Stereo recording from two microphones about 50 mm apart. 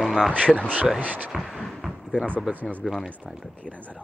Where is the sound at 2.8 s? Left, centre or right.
Centre.